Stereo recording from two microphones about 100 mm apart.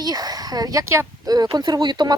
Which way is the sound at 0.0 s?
40° right (ahead or behind).